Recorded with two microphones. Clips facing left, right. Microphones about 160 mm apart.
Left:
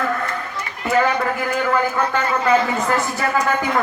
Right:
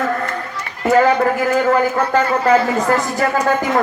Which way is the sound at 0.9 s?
40° right (ahead or behind).